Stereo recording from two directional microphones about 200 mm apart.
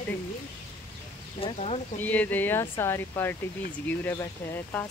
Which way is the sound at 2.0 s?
10° left (ahead or behind).